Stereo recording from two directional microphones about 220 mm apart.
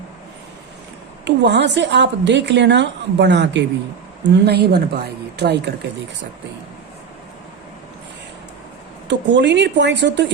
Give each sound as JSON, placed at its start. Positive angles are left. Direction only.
{"t": 1.2, "sound": "a woman's voice", "side_deg": -50}
{"t": 9.0, "sound": "a woman's voice", "side_deg": -55}